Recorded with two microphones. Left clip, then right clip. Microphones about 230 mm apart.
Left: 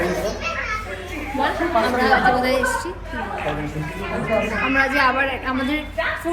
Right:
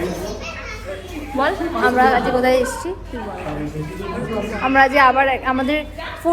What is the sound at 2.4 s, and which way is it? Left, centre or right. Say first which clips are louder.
Speech: right 4 dB; centre.